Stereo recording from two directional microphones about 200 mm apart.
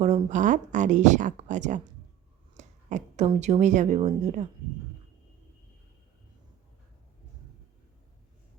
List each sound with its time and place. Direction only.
0.0 s a woman's voice: 35° right (ahead or behind)